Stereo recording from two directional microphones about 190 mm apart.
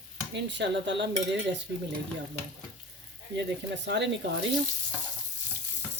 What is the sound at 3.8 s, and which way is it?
Frying, 65° right (ahead or behind).